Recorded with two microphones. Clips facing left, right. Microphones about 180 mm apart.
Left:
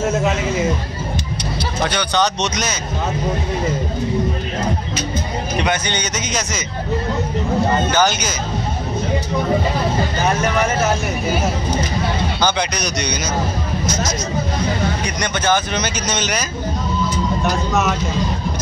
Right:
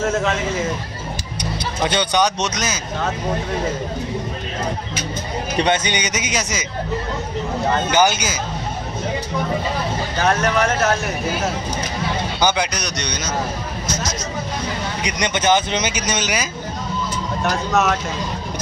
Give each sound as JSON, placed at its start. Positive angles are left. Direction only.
{"t": 1.9, "sound": "speech", "side_deg": -20}
{"t": 2.2, "sound": "speech", "side_deg": -5}
{"t": 5.9, "sound": "speech", "side_deg": -15}
{"t": 7.9, "sound": "speech", "side_deg": -10}
{"t": 10.2, "sound": "speech", "side_deg": 5}
{"t": 12.4, "sound": "speech", "side_deg": -15}
{"t": 12.7, "sound": "speech", "side_deg": 5}
{"t": 15.0, "sound": "speech", "side_deg": -20}